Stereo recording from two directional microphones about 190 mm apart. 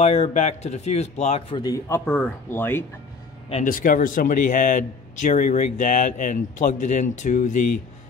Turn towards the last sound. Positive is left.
turn(degrees=40)  # may be behind; listen again after turning